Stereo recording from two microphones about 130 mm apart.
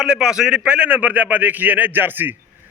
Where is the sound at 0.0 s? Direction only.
5° right (ahead or behind).